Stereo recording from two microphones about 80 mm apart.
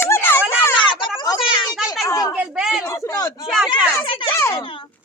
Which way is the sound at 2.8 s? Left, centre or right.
Left.